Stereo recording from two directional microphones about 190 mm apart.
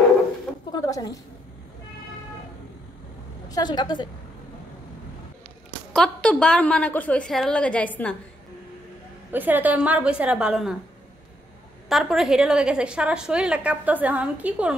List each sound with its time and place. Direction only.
0.7 s a sound: 20° left (ahead or behind)
3.4 s a woman's voice: 20° left (ahead or behind)
5.9 s a woman's voice: 5° left (ahead or behind)
9.3 s a woman's voice: 10° right (ahead or behind)
11.9 s a woman's voice: centre (ahead or behind)